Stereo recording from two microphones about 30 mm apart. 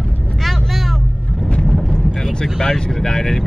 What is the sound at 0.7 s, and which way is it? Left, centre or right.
Vehicle, centre.